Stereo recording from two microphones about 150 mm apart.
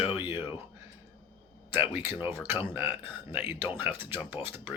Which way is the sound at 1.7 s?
15° right (ahead or behind).